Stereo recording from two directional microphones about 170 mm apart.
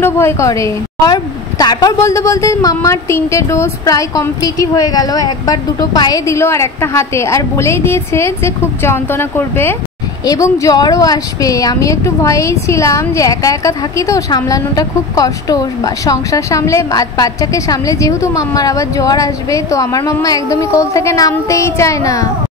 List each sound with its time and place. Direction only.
0.0 s a woman's voice: 15° left (ahead or behind)